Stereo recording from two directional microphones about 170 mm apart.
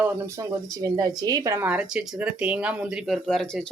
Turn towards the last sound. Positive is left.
turn(degrees=0)  # may be behind; listen again after turning